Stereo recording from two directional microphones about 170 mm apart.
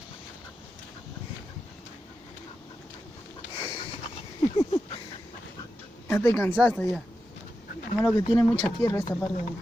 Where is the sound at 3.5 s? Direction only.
30° left (ahead or behind).